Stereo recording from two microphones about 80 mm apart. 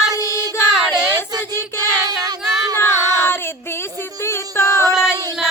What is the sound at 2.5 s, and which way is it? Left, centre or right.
Female singing, right.